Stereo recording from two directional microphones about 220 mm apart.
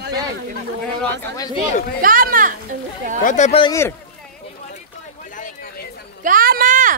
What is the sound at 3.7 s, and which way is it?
Speech, 10° left (ahead or behind).